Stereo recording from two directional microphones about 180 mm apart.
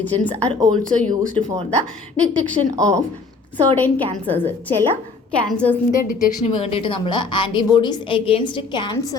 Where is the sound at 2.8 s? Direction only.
20° right (ahead or behind).